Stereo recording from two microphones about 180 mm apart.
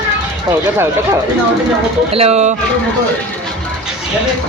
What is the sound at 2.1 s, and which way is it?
Speech, 35° right (ahead or behind).